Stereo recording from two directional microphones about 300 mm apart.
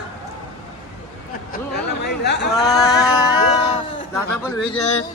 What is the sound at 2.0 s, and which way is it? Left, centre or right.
Speech, left.